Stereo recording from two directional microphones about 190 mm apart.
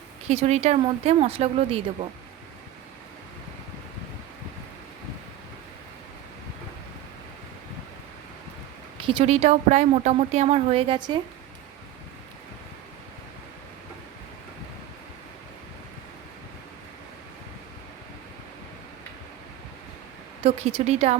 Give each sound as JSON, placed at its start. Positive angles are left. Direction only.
{"t": 0.3, "sound": "speech", "side_deg": -35}
{"t": 9.0, "sound": "speech", "side_deg": -25}
{"t": 20.4, "sound": "speech", "side_deg": -35}